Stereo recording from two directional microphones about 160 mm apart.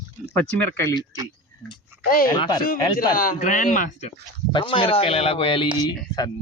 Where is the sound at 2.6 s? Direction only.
65° left (ahead or behind).